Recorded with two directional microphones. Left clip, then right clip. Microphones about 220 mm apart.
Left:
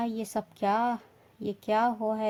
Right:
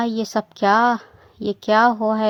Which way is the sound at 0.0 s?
20° right (ahead or behind).